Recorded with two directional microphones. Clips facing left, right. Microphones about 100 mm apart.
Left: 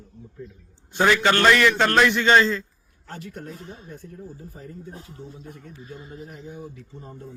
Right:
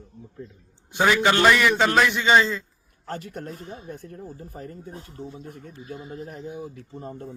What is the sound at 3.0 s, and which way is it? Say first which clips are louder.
Speech: right 3 dB; 45° right (ahead or behind).